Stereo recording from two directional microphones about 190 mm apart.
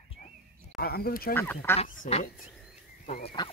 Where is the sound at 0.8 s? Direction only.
55° left (ahead or behind).